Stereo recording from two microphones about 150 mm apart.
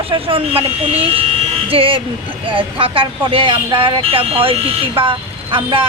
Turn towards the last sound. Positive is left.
turn(degrees=-35)  # may be behind; listen again after turning